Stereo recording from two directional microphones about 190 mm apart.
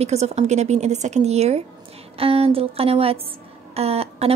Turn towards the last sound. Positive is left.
turn(degrees=-30)  # may be behind; listen again after turning